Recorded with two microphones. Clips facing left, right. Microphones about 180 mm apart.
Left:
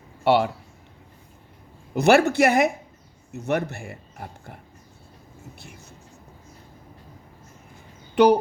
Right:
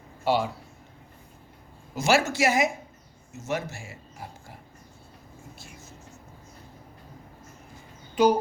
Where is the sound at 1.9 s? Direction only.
60° left (ahead or behind).